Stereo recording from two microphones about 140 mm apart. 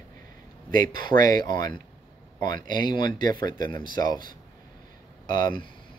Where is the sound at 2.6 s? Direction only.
80° right.